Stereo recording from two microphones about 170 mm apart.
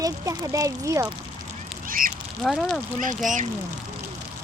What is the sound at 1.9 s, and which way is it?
Duck, 55° right (ahead or behind).